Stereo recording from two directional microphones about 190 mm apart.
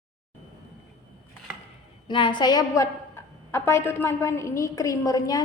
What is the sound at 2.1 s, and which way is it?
A woman's voice, 25° left (ahead or behind).